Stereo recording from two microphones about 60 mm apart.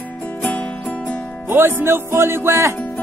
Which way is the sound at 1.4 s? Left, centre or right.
Right.